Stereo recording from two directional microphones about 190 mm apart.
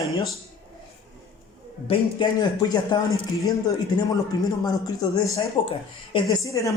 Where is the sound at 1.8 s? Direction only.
25° left (ahead or behind).